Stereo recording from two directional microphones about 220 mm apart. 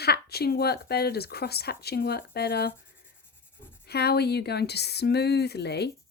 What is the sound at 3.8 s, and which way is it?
A woman's voice, 45° left (ahead or behind).